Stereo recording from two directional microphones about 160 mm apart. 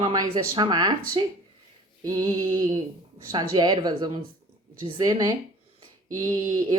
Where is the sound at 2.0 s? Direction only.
20° right (ahead or behind).